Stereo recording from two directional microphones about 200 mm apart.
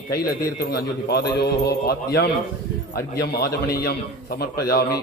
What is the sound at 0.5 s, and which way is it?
A man's voice, 55° left (ahead or behind).